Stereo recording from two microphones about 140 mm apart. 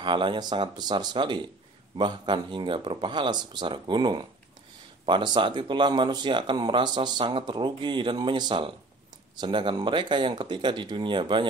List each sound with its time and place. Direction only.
0.0 s speech: 35° right (ahead or behind)